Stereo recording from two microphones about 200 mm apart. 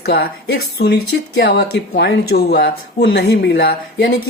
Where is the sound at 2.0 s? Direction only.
55° left (ahead or behind).